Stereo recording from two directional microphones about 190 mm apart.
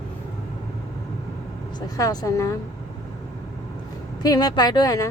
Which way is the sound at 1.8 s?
20° left (ahead or behind).